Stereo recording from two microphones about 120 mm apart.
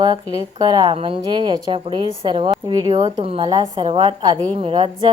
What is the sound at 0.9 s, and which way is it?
Speech, 50° right (ahead or behind).